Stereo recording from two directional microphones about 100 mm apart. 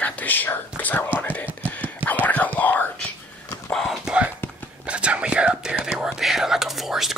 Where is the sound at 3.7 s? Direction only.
Centre (ahead or behind).